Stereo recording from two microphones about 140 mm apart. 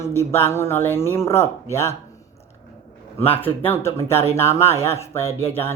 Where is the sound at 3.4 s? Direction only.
15° left (ahead or behind).